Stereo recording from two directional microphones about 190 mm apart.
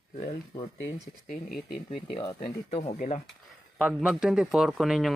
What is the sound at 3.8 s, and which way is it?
Speech, 5° right (ahead or behind).